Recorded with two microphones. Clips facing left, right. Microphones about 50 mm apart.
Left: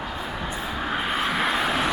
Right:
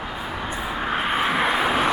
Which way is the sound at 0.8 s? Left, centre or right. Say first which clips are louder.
Right 3 dB; centre.